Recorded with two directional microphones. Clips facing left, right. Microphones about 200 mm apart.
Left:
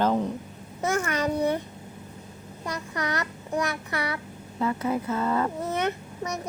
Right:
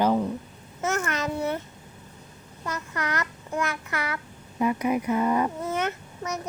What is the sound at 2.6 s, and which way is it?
Child singing, 15° left (ahead or behind).